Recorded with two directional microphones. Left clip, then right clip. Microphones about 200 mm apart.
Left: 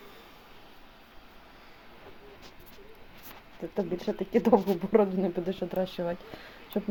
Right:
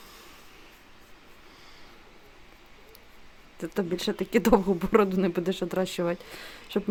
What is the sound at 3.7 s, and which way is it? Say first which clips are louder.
Speech: right 2 dB; 45° right (ahead or behind).